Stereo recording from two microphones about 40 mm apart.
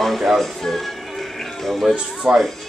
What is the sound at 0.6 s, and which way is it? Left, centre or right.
Music, centre.